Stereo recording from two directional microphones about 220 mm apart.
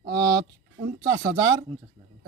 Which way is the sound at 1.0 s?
45° right (ahead or behind).